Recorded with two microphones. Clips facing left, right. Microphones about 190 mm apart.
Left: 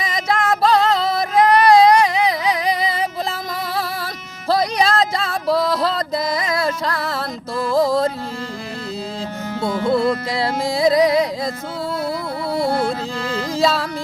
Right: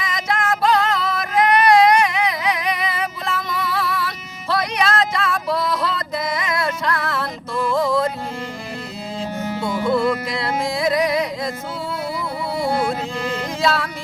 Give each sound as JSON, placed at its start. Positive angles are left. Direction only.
{"t": 0.0, "sound": "music", "side_deg": 35}
{"t": 9.9, "sound": "music", "side_deg": 35}
{"t": 12.6, "sound": "music", "side_deg": -15}